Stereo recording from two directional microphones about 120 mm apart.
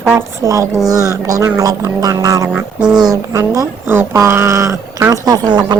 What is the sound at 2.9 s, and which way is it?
Speech, 30° right (ahead or behind).